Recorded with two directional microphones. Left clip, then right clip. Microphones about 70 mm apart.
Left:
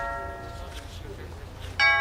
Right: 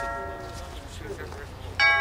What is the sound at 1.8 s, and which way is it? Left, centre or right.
Music, centre.